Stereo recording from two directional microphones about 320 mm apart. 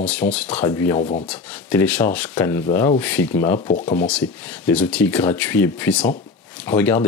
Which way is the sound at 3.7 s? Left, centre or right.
Left.